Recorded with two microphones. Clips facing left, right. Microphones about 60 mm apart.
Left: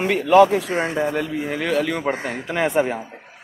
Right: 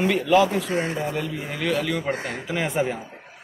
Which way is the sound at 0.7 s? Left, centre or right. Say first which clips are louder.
Left 3 dB; left.